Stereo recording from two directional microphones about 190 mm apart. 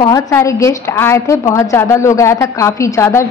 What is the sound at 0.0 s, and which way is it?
A woman's voice, 15° left (ahead or behind).